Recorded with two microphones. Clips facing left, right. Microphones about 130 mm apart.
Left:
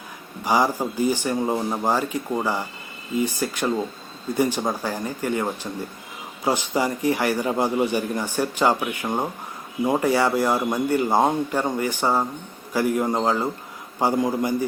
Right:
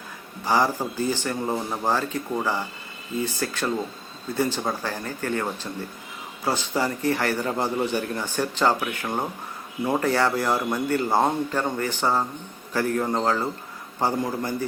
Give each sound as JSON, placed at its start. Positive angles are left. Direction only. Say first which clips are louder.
{"t": 0.4, "sound": "a man's voice", "louder": "left 2 dB", "side_deg": 15}